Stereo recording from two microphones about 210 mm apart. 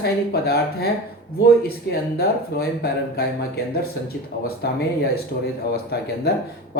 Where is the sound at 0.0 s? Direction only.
50° left (ahead or behind).